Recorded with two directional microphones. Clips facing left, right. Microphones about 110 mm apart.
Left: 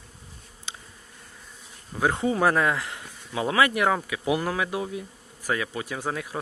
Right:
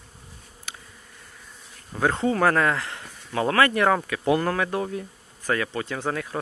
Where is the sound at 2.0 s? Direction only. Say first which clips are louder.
Right 1 dB; 15° left (ahead or behind).